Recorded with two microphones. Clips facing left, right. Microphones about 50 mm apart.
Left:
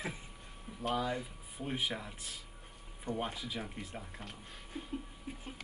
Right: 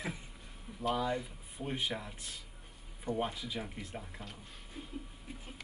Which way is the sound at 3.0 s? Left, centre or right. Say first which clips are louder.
Right 2 dB; centre.